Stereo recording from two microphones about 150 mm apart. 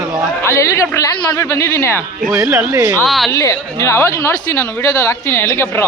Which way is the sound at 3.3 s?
20° left (ahead or behind).